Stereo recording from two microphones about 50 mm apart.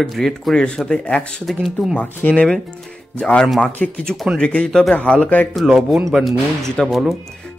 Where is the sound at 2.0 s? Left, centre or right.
Left.